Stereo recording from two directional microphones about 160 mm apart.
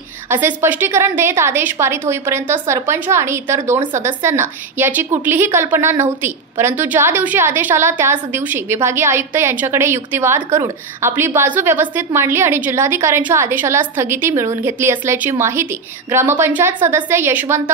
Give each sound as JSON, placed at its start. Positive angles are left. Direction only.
{"t": 0.3, "sound": "a woman's voice", "side_deg": -15}